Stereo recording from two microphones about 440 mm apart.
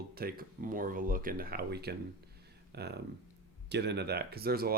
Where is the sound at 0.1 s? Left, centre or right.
Right.